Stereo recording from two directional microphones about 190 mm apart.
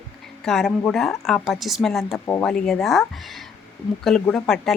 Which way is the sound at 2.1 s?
15° left (ahead or behind).